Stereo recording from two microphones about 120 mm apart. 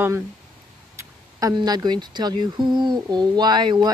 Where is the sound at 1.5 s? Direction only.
35° right (ahead or behind).